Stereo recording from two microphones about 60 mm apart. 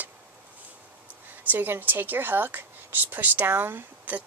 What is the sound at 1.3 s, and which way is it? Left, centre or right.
Speech, right.